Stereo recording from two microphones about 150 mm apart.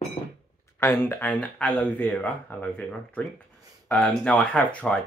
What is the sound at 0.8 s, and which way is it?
Speech, 15° left (ahead or behind).